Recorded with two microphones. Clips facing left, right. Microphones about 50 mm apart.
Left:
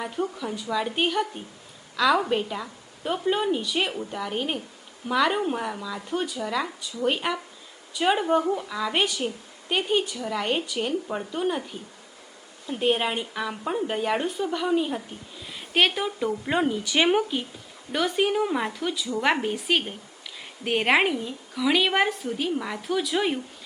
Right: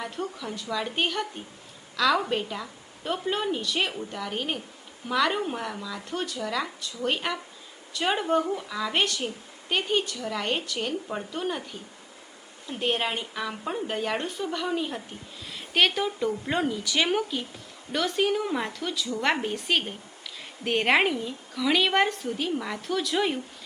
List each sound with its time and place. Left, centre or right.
0.0 s a woman's voice: centre
16.6 s a woman's voice: left; by 23.4 s centre